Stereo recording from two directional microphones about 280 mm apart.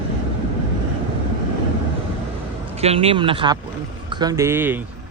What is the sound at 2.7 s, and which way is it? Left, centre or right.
Speech, right.